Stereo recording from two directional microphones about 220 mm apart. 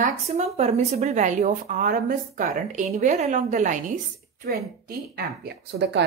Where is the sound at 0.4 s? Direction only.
30° right (ahead or behind).